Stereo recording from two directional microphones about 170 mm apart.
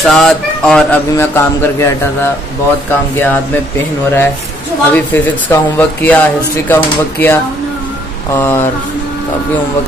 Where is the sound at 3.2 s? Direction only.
15° left (ahead or behind).